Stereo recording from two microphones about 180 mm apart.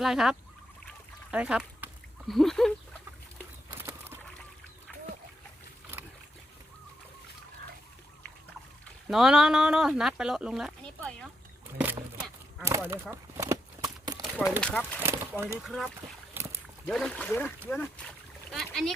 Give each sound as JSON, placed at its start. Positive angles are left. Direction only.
{"t": 0.0, "sound": "speech", "side_deg": 0}
{"t": 1.3, "sound": "a sound", "side_deg": -5}
{"t": 3.7, "sound": "a sound", "side_deg": -10}
{"t": 9.0, "sound": "speech", "side_deg": 0}
{"t": 11.8, "sound": "a sound", "side_deg": -5}
{"t": 14.6, "sound": "speech", "side_deg": 5}
{"t": 15.0, "sound": "speech", "side_deg": -15}
{"t": 15.6, "sound": "speech", "side_deg": 0}
{"t": 16.3, "sound": "boat", "side_deg": -15}
{"t": 16.8, "sound": "speech", "side_deg": 5}